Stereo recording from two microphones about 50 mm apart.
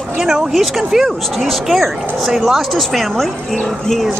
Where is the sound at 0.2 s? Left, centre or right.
Centre.